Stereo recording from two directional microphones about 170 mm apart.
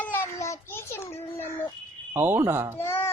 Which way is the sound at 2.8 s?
15° left (ahead or behind).